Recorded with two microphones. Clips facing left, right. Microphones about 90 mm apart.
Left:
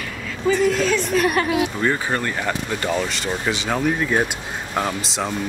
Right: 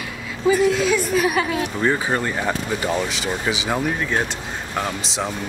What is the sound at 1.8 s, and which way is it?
Speech, 15° right (ahead or behind).